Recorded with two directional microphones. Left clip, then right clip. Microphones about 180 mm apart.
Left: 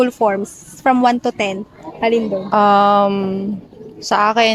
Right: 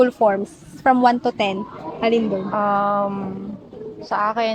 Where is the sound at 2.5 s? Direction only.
75° left (ahead or behind).